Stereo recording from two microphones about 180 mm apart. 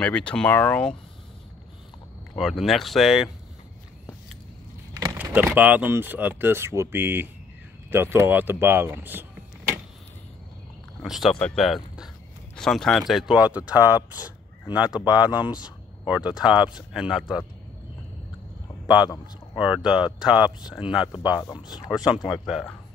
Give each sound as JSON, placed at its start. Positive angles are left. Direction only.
{"t": 0.0, "sound": "speech", "side_deg": 5}
{"t": 2.3, "sound": "speech", "side_deg": 0}
{"t": 5.0, "sound": "speech", "side_deg": -10}
{"t": 11.0, "sound": "speech", "side_deg": 0}
{"t": 15.5, "sound": "a sound", "side_deg": 25}
{"t": 16.1, "sound": "speech", "side_deg": -5}
{"t": 19.5, "sound": "speech", "side_deg": -5}
{"t": 21.5, "sound": "speech", "side_deg": 20}
{"t": 21.9, "sound": "speech", "side_deg": -5}